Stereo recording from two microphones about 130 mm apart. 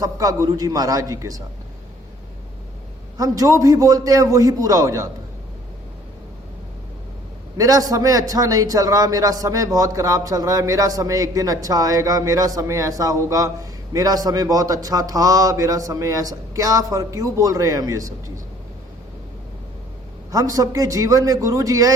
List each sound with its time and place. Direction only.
0.0 s a man's voice: 25° right (ahead or behind)
3.2 s a man's voice: 25° right (ahead or behind)
7.5 s a man's voice: 25° right (ahead or behind)
20.3 s a man's voice: 25° right (ahead or behind)